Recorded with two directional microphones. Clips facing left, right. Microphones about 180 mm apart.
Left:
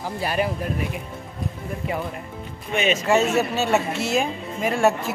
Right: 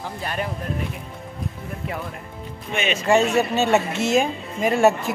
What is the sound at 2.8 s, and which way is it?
Speech, 40° left (ahead or behind).